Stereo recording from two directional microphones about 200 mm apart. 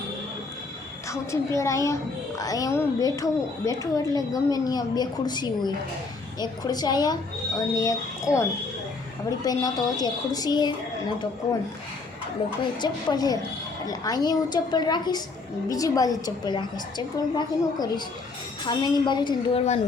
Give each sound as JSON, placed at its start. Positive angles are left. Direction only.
{"t": 1.1, "sound": "a child's voice", "side_deg": 15}
{"t": 9.4, "sound": "a woman's voice", "side_deg": 20}
{"t": 12.8, "sound": "a woman's voice", "side_deg": 20}